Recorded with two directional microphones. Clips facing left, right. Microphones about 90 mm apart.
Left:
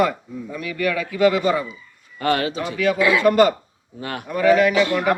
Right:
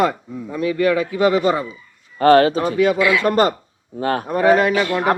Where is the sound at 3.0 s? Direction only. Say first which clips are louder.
Right 1 dB; 30° left (ahead or behind).